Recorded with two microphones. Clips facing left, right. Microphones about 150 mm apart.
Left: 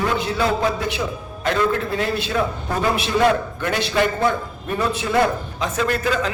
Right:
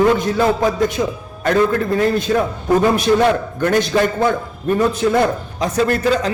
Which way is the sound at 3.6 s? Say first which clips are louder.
Right 5 dB; 45° right (ahead or behind).